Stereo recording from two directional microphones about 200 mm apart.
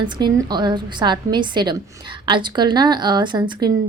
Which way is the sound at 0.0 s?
20° right (ahead or behind).